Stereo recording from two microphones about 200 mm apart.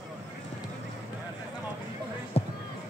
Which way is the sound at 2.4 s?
30° left (ahead or behind).